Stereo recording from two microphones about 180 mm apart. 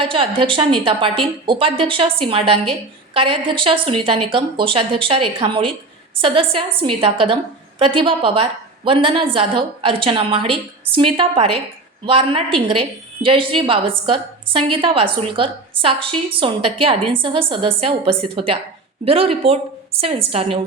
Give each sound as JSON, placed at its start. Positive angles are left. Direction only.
{"t": 0.0, "sound": "a woman's voice", "side_deg": -30}